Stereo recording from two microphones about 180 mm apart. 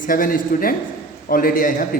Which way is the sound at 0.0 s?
50° left (ahead or behind).